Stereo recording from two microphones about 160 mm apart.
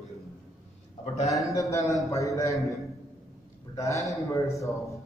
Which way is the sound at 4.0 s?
Centre (ahead or behind).